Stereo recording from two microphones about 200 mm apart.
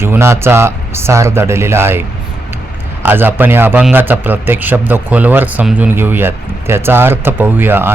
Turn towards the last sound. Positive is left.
turn(degrees=-10)  # may be behind; listen again after turning